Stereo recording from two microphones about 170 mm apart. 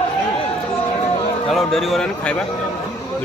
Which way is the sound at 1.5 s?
Centre (ahead or behind).